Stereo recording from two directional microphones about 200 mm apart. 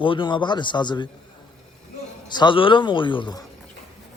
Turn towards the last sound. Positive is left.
turn(degrees=20)  # may be behind; listen again after turning